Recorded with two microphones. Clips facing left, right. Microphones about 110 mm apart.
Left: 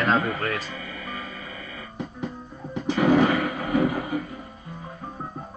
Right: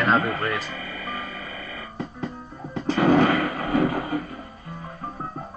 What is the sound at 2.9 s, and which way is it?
Artillery fire, 45° right (ahead or behind).